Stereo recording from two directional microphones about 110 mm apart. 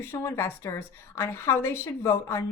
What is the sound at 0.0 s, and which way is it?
A woman's voice, 25° left (ahead or behind).